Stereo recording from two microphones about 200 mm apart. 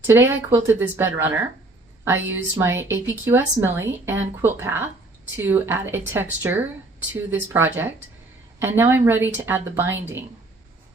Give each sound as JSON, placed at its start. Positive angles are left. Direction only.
{"t": 0.1, "sound": "a woman's voice", "side_deg": -10}